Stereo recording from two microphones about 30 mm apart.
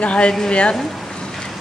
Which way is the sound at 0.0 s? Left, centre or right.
Left.